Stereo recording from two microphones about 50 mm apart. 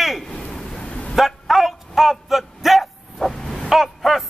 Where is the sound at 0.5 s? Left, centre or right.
Centre.